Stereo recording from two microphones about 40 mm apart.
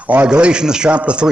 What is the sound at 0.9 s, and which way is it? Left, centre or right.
Speech, right.